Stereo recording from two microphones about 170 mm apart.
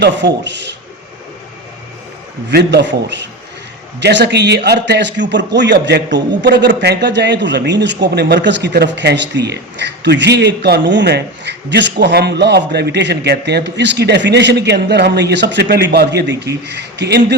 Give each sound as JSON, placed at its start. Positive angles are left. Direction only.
{"t": 0.0, "sound": "a man's voice", "side_deg": -90}
{"t": 2.5, "sound": "a man's voice", "side_deg": -75}
{"t": 16.6, "sound": "a man's voice", "side_deg": -90}